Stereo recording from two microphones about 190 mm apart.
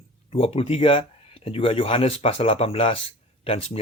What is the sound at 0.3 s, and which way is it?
Speech, 30° left (ahead or behind).